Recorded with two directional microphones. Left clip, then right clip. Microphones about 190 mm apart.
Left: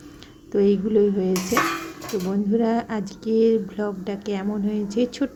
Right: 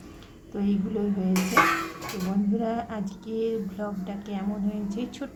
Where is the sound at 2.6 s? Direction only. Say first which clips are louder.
Left 6 dB; 20° left (ahead or behind).